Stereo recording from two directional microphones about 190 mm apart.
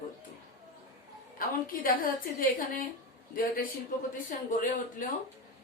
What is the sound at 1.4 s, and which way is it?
Speech, 50° left (ahead or behind).